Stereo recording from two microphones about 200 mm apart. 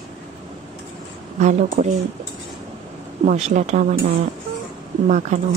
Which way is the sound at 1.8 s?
40° right (ahead or behind).